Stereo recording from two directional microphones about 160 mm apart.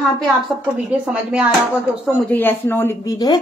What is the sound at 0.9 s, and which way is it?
Speech, 5° right (ahead or behind).